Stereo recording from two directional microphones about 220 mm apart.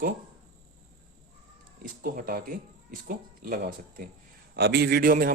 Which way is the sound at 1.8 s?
40° right (ahead or behind).